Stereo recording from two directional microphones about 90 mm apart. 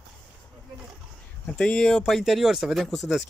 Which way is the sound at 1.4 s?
10° left (ahead or behind).